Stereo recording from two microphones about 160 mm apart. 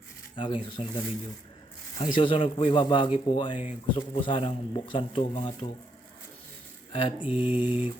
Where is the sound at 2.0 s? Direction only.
30° left (ahead or behind).